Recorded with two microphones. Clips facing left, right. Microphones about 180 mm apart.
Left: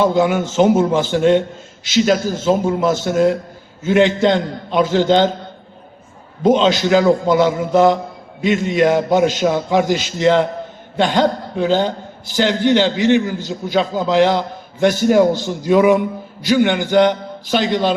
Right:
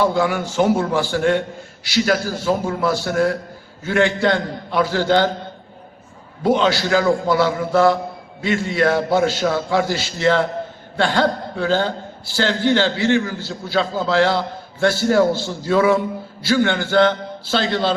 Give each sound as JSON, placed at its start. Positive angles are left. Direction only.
{"t": 0.0, "sound": "a man's voice", "side_deg": 20}
{"t": 6.4, "sound": "a man's voice", "side_deg": 20}